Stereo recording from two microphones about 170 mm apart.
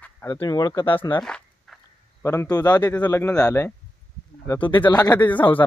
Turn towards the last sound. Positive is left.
turn(degrees=10)  # may be behind; listen again after turning